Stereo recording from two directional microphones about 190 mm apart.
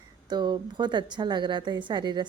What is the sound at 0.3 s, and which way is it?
A woman's voice, 25° right (ahead or behind).